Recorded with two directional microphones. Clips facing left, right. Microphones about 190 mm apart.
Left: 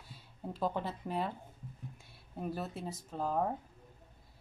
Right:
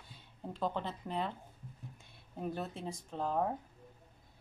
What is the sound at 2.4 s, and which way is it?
Speech, 5° left (ahead or behind).